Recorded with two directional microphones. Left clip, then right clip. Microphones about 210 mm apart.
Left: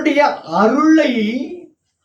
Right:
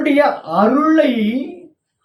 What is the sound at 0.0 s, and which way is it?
Speech, 15° left (ahead or behind).